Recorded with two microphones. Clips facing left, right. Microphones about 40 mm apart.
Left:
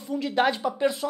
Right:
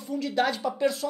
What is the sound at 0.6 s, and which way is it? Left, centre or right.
Speech, centre.